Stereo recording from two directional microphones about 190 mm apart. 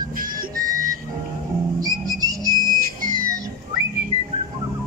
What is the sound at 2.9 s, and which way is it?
Music, 45° right (ahead or behind).